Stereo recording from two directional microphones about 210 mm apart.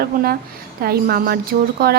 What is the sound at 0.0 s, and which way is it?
A woman's voice, 45° right (ahead or behind).